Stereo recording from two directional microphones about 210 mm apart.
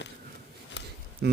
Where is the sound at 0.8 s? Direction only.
55° left (ahead or behind).